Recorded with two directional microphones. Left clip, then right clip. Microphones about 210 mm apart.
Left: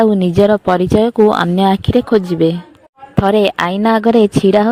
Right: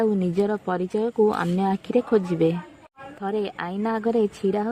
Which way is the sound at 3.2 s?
45° left (ahead or behind).